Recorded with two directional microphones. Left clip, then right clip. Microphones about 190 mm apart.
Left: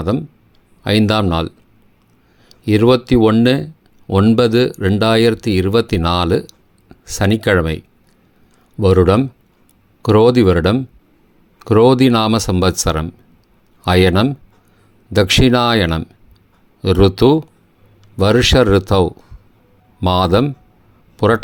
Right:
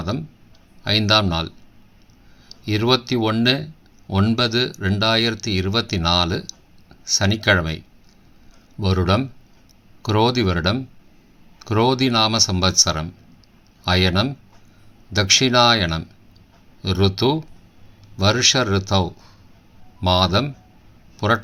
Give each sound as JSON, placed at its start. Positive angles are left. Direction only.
{"t": 0.8, "sound": "speech", "side_deg": 45}
{"t": 2.6, "sound": "speech", "side_deg": 45}
{"t": 20.0, "sound": "speech", "side_deg": 45}